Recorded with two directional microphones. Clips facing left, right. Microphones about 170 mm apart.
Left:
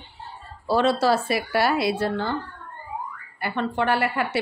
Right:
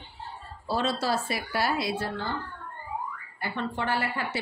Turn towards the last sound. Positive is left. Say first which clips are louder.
# left 7 dB
turn(degrees=70)  # may be behind; listen again after turning